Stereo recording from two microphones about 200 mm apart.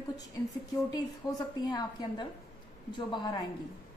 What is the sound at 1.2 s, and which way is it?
A woman's voice, 20° left (ahead or behind).